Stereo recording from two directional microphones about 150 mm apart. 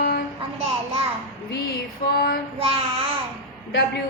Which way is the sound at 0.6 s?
40° right (ahead or behind).